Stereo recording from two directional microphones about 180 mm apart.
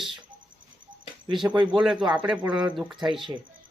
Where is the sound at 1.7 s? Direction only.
5° right (ahead or behind).